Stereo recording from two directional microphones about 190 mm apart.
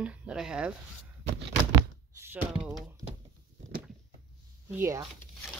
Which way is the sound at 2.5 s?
5° right (ahead or behind).